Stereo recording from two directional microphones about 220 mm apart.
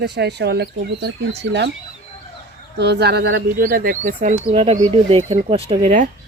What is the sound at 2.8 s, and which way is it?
Speech, 50° right (ahead or behind).